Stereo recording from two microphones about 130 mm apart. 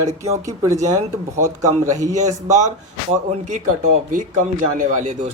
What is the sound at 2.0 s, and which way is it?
Speech, 70° right (ahead or behind).